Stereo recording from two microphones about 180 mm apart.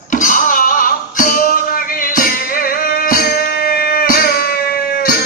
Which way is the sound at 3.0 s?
55° left (ahead or behind).